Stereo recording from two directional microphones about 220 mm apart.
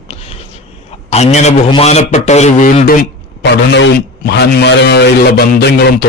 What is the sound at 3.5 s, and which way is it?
A man's voice, 50° left (ahead or behind).